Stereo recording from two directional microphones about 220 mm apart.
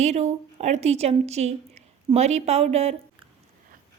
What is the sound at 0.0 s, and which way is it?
A woman's voice, 30° right (ahead or behind).